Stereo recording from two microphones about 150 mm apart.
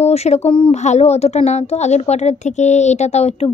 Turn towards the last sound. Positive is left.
turn(degrees=45)  # may be behind; listen again after turning